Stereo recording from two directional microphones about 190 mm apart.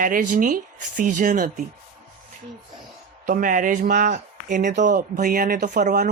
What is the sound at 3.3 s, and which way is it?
Speech, 45° right (ahead or behind).